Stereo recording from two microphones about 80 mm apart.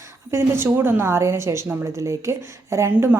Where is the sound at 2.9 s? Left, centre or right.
Right.